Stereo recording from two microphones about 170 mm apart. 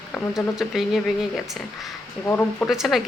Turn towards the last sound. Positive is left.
turn(degrees=0)  # may be behind; listen again after turning